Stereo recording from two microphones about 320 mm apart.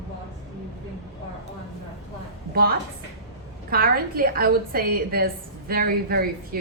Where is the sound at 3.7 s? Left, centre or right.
Right.